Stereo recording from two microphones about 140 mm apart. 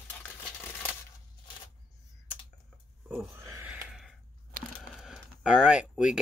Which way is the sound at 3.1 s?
15° right (ahead or behind).